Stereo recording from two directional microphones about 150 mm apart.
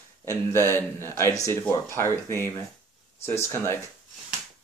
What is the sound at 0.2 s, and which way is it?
Speech, 15° left (ahead or behind).